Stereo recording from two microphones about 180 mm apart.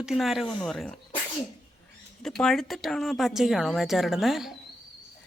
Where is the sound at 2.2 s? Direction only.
5° left (ahead or behind).